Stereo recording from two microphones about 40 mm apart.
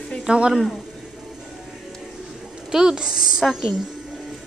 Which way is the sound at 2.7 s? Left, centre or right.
Centre.